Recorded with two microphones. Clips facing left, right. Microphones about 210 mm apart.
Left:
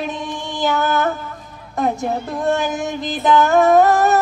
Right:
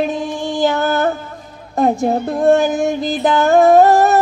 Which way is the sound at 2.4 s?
30° right (ahead or behind).